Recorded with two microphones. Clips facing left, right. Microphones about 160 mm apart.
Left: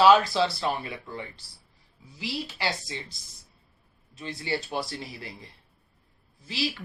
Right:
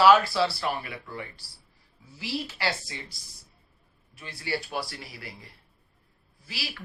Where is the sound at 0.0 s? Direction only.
20° left (ahead or behind).